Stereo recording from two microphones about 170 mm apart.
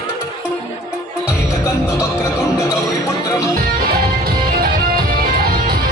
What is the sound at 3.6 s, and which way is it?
Music, 60° right (ahead or behind).